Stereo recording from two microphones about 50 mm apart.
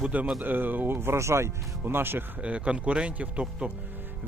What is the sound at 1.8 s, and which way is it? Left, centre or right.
Music, right.